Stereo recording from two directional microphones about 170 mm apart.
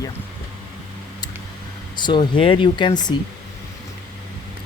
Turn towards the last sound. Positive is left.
turn(degrees=25)  # may be behind; listen again after turning